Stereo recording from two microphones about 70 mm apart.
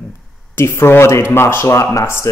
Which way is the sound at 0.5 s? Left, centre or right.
Left.